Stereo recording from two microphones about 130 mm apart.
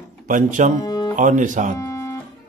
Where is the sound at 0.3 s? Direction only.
80° right.